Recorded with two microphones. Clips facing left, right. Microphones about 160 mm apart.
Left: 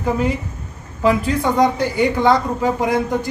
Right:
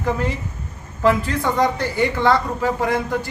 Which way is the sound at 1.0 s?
10° left (ahead or behind).